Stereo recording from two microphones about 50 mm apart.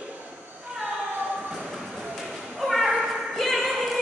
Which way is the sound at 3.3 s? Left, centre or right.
Centre.